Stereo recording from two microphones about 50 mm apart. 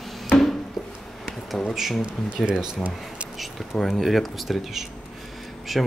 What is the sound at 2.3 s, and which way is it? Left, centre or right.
Speech, centre.